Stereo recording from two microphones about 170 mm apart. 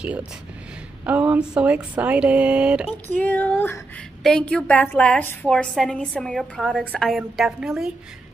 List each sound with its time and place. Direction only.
0.0 s speech: 5° right (ahead or behind)
2.9 s a woman's voice: 10° left (ahead or behind)